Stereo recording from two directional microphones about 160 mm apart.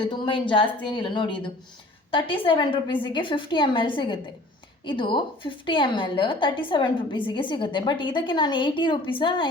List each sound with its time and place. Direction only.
0.0 s a woman's voice: 30° left (ahead or behind)